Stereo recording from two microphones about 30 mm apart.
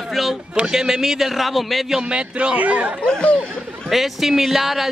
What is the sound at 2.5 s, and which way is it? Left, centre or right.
Speech, right.